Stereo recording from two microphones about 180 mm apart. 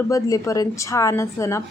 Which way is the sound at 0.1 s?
20° left (ahead or behind).